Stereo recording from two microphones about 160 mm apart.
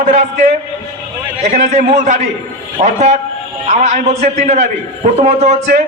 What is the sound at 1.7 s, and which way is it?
A man's voice, 50° right (ahead or behind).